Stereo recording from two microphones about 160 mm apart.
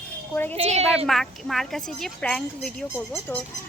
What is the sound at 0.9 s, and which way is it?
Speech, centre (ahead or behind).